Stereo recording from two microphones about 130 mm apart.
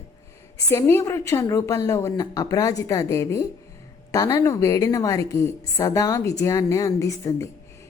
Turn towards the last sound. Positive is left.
turn(degrees=25)  # may be behind; listen again after turning